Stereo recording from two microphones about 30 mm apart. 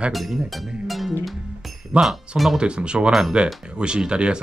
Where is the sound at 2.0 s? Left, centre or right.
Centre.